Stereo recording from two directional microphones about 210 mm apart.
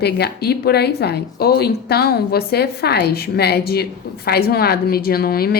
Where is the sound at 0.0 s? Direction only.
50° left (ahead or behind).